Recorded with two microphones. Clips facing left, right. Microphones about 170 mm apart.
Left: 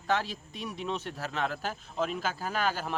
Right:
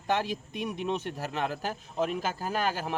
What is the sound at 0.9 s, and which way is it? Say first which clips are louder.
Speech: right 3 dB; 15° right (ahead or behind).